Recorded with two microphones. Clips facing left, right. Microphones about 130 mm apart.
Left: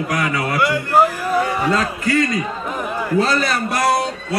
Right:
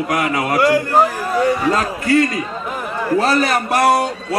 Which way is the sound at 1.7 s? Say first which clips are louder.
Right 2 dB; 35° right (ahead or behind).